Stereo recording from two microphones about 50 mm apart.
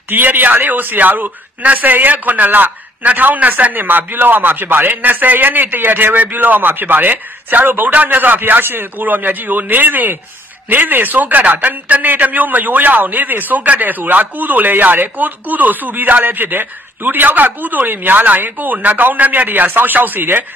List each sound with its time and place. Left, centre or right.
0.1 s a man's voice: right